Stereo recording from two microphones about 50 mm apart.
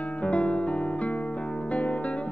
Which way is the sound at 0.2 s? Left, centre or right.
Left.